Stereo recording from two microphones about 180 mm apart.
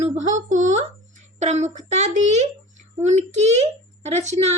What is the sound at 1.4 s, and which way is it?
Speech, 40° right (ahead or behind).